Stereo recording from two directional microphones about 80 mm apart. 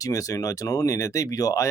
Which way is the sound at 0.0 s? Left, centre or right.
Left.